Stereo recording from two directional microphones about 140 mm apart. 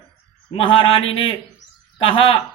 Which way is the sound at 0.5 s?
40° left (ahead or behind).